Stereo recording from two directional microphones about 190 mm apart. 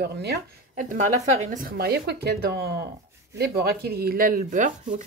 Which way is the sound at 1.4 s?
45° right (ahead or behind).